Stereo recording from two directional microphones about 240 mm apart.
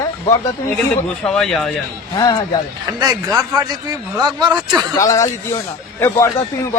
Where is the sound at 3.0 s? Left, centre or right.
Centre.